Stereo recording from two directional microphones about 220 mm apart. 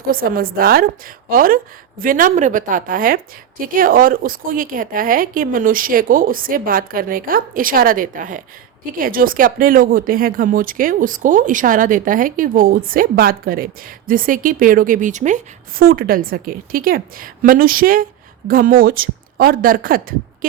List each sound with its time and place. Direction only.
0.1 s speech: 40° right (ahead or behind)